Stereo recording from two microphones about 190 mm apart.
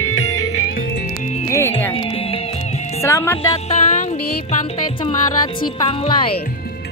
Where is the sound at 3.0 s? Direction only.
15° left (ahead or behind).